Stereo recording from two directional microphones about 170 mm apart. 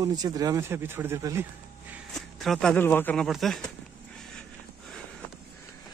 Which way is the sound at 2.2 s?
Centre (ahead or behind).